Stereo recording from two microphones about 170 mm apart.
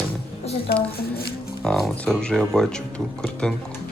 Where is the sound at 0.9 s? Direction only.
65° left (ahead or behind).